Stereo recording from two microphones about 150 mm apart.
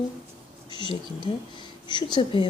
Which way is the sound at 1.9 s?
30° left (ahead or behind).